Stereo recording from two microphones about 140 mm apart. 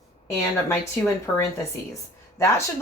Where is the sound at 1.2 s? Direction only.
20° left (ahead or behind).